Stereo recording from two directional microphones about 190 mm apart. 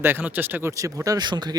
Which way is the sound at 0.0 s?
10° right (ahead or behind).